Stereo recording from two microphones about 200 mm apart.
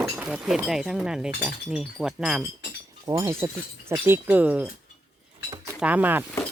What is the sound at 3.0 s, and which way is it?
Speech, 15° right (ahead or behind).